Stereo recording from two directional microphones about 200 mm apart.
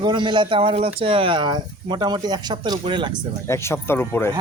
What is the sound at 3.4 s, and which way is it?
Speech, 15° left (ahead or behind).